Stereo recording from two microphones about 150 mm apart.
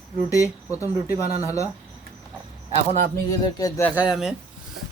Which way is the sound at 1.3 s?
45° right (ahead or behind).